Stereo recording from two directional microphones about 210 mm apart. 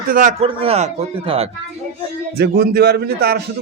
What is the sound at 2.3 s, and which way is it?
A man's voice, 50° right (ahead or behind).